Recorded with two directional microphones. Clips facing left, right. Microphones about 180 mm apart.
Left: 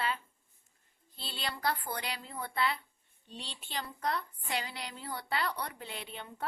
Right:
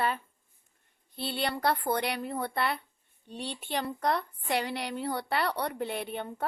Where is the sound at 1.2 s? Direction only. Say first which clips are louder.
Right 7 dB; 60° right (ahead or behind).